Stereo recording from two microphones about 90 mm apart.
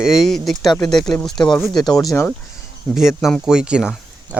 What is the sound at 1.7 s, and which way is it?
Speech, 50° left (ahead or behind).